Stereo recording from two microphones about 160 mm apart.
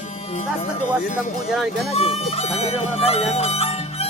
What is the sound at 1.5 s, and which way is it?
Speech, centre (ahead or behind).